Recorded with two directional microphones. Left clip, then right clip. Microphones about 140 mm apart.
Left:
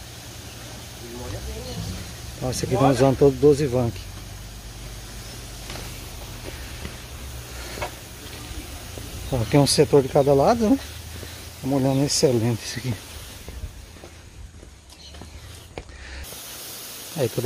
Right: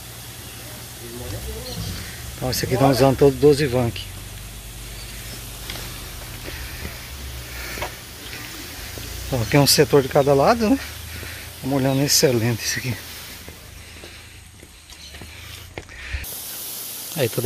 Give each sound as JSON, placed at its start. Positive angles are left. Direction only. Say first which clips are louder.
{"t": 2.5, "sound": "speech", "louder": "right 2 dB", "side_deg": 5}
{"t": 7.8, "sound": "tick-tock", "louder": "even", "side_deg": -50}
{"t": 9.5, "sound": "speech", "louder": "right 2 dB", "side_deg": 15}
{"t": 11.6, "sound": "speech", "louder": "right 1 dB", "side_deg": 5}